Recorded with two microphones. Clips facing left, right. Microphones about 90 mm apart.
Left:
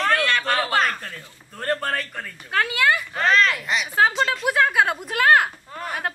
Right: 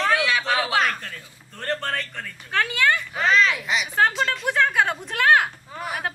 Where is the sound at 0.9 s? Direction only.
15° left (ahead or behind).